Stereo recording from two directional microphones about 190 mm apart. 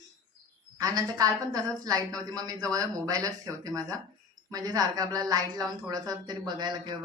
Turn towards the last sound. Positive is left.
turn(degrees=-20)  # may be behind; listen again after turning